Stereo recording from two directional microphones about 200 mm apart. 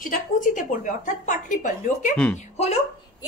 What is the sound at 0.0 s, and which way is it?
A woman's voice, 40° left (ahead or behind).